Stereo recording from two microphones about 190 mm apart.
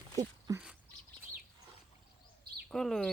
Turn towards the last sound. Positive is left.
turn(degrees=0)  # may be behind; listen again after turning